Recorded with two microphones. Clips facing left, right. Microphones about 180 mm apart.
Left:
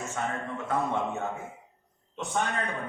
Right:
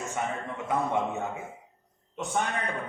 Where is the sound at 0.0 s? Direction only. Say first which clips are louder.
Right 1 dB; 15° right (ahead or behind).